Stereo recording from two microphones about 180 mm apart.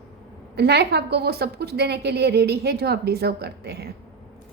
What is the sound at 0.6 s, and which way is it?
A woman's voice, 65° right (ahead or behind).